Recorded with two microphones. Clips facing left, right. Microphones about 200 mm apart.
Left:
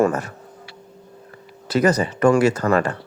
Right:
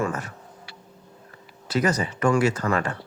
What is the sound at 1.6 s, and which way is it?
Speech, 40° left (ahead or behind).